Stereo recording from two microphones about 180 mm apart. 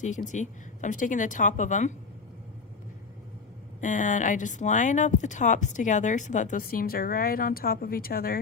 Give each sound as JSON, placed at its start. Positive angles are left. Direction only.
{"t": 0.0, "sound": "speech", "side_deg": 40}
{"t": 3.8, "sound": "speech", "side_deg": 45}